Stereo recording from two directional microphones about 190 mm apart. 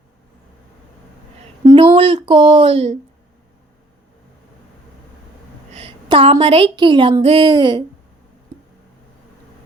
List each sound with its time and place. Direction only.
1.6 s speech: 25° right (ahead or behind)
5.7 s a woman's voice: 30° right (ahead or behind)